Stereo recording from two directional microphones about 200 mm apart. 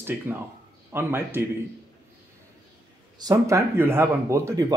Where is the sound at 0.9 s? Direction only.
10° right (ahead or behind).